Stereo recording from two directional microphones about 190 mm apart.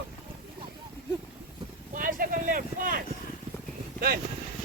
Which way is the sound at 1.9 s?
45° right (ahead or behind).